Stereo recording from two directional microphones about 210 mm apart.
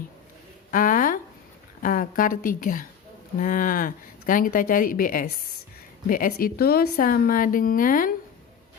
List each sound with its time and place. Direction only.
0.7 s a woman's voice: 40° left (ahead or behind)